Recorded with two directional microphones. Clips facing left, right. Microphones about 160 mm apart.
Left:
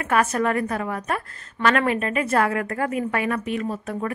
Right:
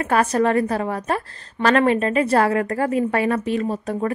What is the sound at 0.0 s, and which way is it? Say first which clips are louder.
A woman's voice: right 3 dB; 30° right (ahead or behind).